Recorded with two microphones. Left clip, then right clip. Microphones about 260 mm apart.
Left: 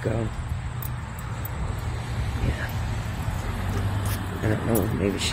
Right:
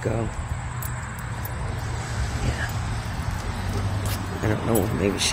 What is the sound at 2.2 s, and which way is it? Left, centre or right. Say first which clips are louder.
Vehicle: right 2 dB; centre.